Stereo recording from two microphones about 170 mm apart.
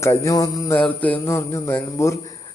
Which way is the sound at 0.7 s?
10° left (ahead or behind).